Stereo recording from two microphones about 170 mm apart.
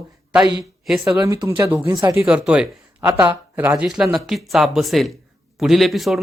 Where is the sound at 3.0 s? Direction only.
15° right (ahead or behind); by 6.2 s centre (ahead or behind).